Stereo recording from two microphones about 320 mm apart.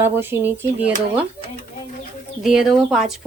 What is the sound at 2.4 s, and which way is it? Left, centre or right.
Speech, centre.